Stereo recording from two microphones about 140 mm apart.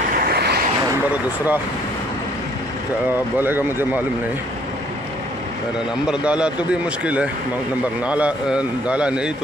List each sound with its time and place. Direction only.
0.1 s vehicle: 90° right
1.1 s a man's voice: 10° right (ahead or behind)
3.3 s a man's voice: 15° right (ahead or behind)
6.0 s a man's voice: 5° right (ahead or behind)